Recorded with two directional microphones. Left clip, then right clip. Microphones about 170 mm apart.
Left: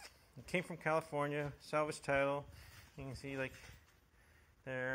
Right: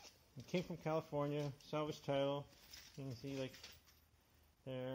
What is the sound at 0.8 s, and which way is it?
Speech, 20° right (ahead or behind).